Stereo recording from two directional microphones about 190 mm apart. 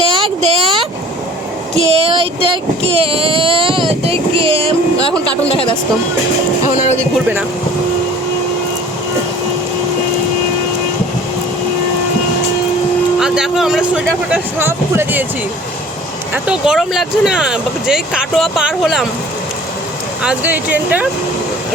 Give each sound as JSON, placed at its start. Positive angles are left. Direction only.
{"t": 0.1, "sound": "a sound", "side_deg": -30}
{"t": 1.9, "sound": "child singing", "side_deg": -30}
{"t": 5.5, "sound": "speech", "side_deg": 30}
{"t": 6.7, "sound": "speech", "side_deg": 40}
{"t": 13.1, "sound": "speech", "side_deg": -5}
{"t": 16.3, "sound": "speech", "side_deg": -5}
{"t": 20.2, "sound": "speech", "side_deg": -10}